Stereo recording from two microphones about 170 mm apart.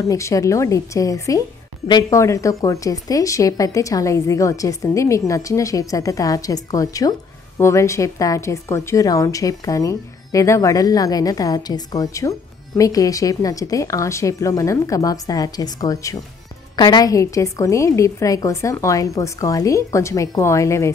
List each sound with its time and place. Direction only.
0.0 s a woman's voice: 20° left (ahead or behind)